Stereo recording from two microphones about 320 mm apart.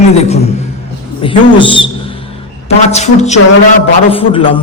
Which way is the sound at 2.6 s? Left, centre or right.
Left.